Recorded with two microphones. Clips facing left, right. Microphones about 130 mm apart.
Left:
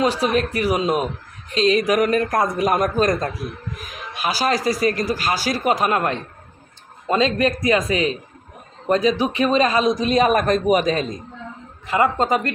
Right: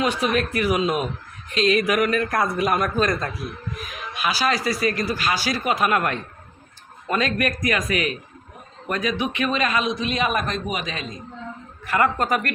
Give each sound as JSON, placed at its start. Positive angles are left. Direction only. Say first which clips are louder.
{"t": 0.0, "sound": "a man's voice", "louder": "left 3 dB", "side_deg": 35}
{"t": 11.9, "sound": "a man's voice", "louder": "left 3 dB", "side_deg": 20}